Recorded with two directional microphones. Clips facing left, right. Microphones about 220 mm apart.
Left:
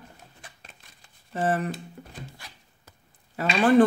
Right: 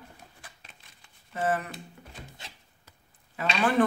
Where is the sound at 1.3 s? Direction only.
35° left (ahead or behind).